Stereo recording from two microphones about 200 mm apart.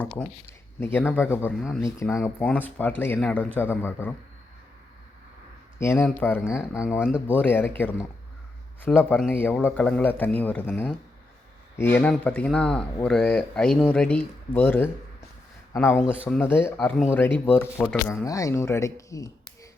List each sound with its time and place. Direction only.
0.2 s speech: 10° left (ahead or behind)
5.8 s speech: 10° left (ahead or behind)
6.7 s speech: 5° right (ahead or behind)
7.3 s speech: 10° left (ahead or behind)
8.8 s speech: 10° left (ahead or behind)
16.7 s speech: centre (ahead or behind)
18.3 s speech: 15° left (ahead or behind)